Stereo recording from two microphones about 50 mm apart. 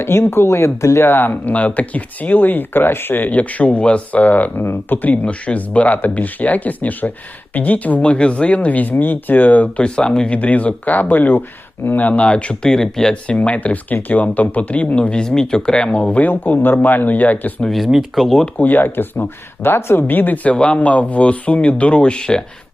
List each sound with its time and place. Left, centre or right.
0.0 s speech: left
1.0 s speech: left
1.5 s speech: left
5.0 s speech: left
8.0 s speech: left
12.6 s speech: centre
13.2 s speech: left
17.7 s speech: centre
18.5 s speech: left
18.8 s speech: left; by 22.4 s centre